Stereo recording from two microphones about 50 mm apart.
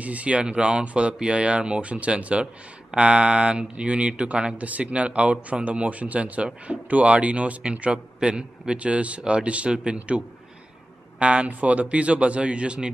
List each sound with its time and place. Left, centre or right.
0.0 s speech: right
11.1 s speech: right